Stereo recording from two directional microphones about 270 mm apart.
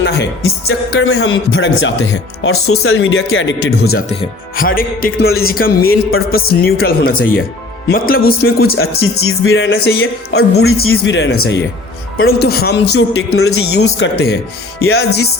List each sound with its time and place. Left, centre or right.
0.0 s speech: left
5.3 s speech: left
5.5 s speech: left
9.4 s speech: left